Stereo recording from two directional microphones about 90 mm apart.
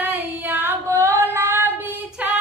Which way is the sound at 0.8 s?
30° right (ahead or behind).